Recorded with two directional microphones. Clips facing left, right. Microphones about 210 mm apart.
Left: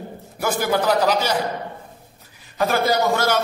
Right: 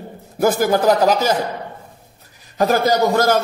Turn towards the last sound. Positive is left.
turn(degrees=-45)  # may be behind; listen again after turning